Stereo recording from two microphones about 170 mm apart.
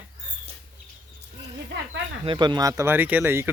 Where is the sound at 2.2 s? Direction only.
25° right (ahead or behind).